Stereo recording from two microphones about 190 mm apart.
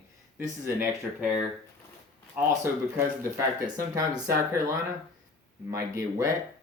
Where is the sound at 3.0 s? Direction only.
15° right (ahead or behind).